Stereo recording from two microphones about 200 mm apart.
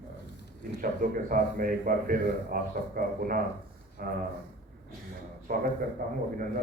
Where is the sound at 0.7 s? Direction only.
45° right (ahead or behind).